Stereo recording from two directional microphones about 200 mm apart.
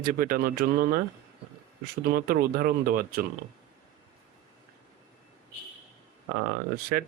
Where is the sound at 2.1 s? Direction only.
45° right (ahead or behind).